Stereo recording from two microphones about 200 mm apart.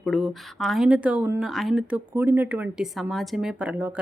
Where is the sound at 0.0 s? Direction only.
Centre (ahead or behind).